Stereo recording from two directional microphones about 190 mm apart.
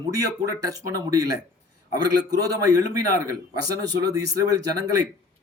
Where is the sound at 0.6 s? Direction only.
20° right (ahead or behind).